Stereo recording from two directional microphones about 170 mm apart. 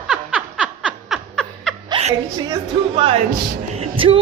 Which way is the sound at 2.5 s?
30° right (ahead or behind).